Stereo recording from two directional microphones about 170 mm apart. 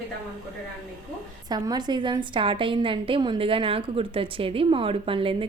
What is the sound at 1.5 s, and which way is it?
A woman's voice, 25° right (ahead or behind).